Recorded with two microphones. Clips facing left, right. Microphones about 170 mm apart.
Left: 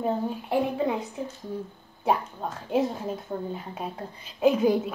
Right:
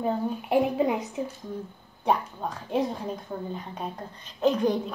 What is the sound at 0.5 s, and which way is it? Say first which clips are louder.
Speech: right 3 dB; 20° right (ahead or behind).